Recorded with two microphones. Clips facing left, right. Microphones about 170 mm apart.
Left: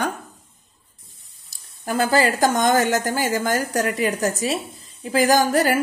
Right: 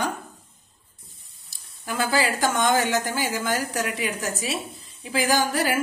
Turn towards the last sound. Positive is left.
turn(degrees=45)  # may be behind; listen again after turning